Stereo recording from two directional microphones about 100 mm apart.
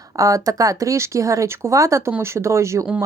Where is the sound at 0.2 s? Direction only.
35° right (ahead or behind).